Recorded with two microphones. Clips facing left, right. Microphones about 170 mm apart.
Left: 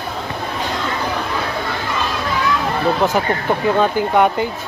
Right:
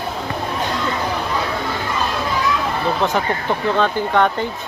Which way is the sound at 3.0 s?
10° left (ahead or behind).